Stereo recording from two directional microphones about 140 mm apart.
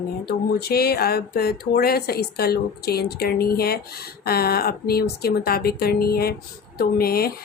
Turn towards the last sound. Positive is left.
turn(degrees=90)